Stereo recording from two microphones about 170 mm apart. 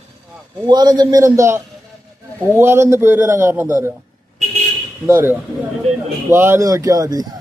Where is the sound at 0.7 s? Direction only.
25° right (ahead or behind).